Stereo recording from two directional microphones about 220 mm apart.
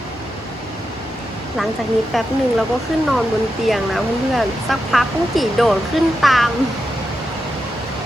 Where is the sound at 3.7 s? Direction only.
Centre (ahead or behind).